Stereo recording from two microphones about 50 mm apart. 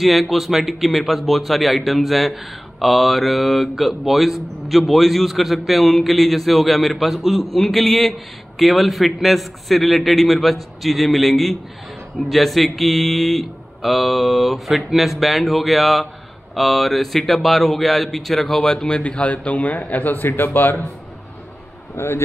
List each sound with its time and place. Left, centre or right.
0.0 s a man's voice: centre
18.7 s a man's voice: centre; by 20.7 s left
21.9 s speech: left